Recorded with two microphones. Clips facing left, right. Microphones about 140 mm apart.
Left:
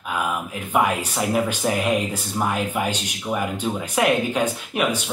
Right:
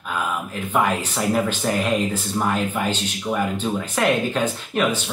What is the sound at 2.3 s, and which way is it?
Speech, 10° left (ahead or behind).